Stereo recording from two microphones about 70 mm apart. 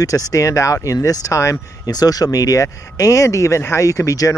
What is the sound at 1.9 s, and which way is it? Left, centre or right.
Speech, left.